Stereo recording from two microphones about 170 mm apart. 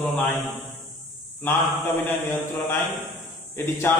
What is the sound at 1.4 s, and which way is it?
A man's voice, 10° left (ahead or behind).